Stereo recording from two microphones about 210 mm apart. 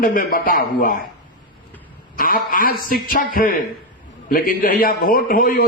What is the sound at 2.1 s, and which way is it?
A man's voice, 40° left (ahead or behind).